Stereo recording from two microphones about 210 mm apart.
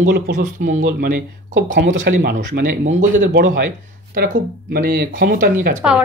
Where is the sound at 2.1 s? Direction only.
45° right (ahead or behind).